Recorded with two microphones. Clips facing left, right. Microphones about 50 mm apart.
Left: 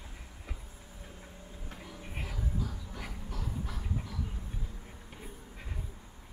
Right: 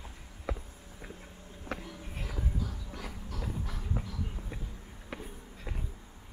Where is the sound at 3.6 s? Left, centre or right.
Centre.